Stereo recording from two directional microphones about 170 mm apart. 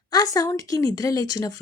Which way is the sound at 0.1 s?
20° left (ahead or behind).